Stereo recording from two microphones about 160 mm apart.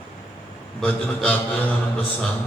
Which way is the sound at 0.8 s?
10° left (ahead or behind).